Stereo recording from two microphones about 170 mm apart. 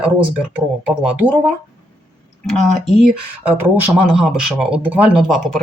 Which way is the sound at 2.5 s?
Centre (ahead or behind).